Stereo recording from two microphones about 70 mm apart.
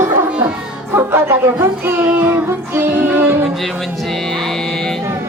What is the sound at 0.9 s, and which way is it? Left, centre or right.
Speech, right.